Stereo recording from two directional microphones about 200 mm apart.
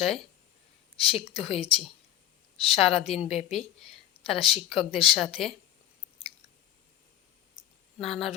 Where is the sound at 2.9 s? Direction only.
30° left (ahead or behind).